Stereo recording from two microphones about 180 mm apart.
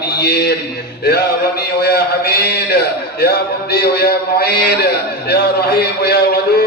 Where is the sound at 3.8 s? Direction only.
60° left (ahead or behind).